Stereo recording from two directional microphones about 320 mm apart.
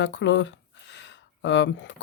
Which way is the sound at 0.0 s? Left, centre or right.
Left.